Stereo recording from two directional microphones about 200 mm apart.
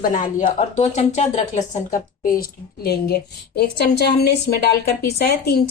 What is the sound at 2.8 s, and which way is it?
A woman's voice, 55° left (ahead or behind).